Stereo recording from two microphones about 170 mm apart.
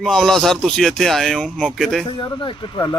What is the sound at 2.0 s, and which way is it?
Speech, 25° left (ahead or behind).